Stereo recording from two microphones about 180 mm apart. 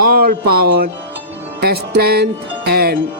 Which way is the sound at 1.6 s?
60° right (ahead or behind).